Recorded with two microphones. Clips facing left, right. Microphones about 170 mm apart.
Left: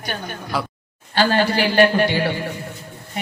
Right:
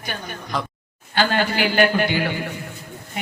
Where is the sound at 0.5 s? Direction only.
5° left (ahead or behind).